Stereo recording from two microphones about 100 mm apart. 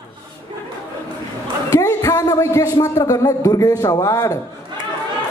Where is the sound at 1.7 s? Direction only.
35° left (ahead or behind).